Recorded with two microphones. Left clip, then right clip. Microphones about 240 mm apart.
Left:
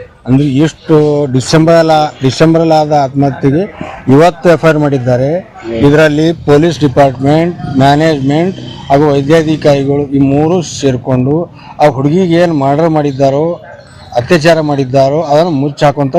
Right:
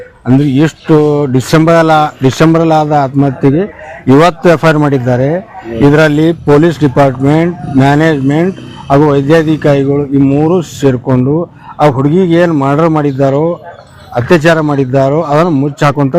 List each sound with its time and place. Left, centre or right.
0.3 s speech: right